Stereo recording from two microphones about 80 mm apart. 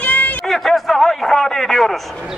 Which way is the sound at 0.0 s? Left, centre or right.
Centre.